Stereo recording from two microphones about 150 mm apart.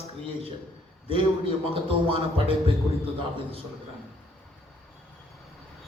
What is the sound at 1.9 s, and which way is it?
Speech, 40° right (ahead or behind).